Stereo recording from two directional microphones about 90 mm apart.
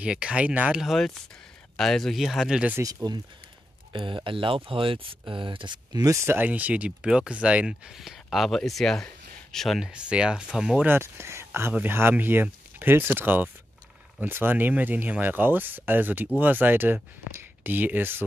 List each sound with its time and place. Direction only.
0.0 s speech: 10° right (ahead or behind)
1.8 s speech: 5° left (ahead or behind)
2.8 s speech: 45° right (ahead or behind)
3.9 s speech: 70° right (ahead or behind)
5.9 s speech: 35° right (ahead or behind)
6.3 s speech: 20° right (ahead or behind)
10.9 s speech: 25° right (ahead or behind)